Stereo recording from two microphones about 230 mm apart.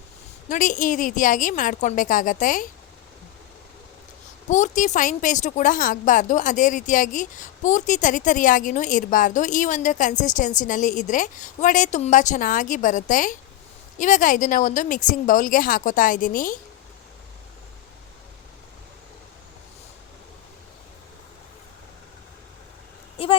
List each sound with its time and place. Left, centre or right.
0.4 s a woman's voice: left
4.4 s a woman's voice: left
23.2 s a sound: left